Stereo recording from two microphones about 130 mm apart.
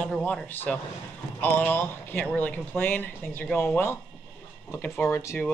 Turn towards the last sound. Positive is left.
turn(degrees=20)  # may be behind; listen again after turning